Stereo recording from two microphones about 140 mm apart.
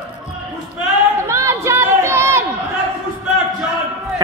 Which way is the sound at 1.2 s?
20° right (ahead or behind).